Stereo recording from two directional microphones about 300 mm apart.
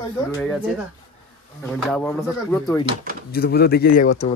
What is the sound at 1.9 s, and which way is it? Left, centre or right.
Speech, centre.